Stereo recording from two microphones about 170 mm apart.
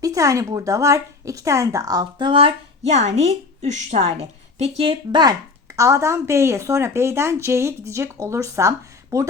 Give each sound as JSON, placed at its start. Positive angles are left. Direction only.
{"t": 0.0, "sound": "speech", "side_deg": -20}
{"t": 5.7, "sound": "speech", "side_deg": -15}